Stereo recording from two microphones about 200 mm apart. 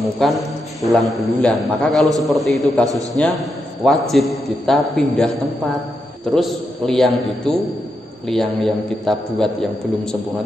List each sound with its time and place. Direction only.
0.0 s a man's voice: centre (ahead or behind)
2.8 s a man's voice: 15° right (ahead or behind)
3.8 s a man's voice: centre (ahead or behind)
6.3 s a man's voice: centre (ahead or behind)